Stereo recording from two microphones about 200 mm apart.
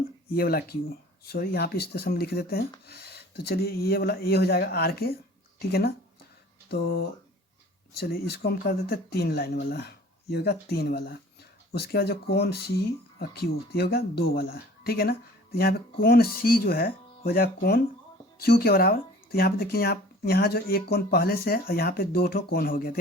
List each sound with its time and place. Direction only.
0.3 s speech: 50° left (ahead or behind)